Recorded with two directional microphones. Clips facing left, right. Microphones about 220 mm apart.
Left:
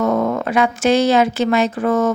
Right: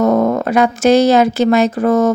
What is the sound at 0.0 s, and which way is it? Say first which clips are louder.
Speech: right 5 dB; 40° right (ahead or behind).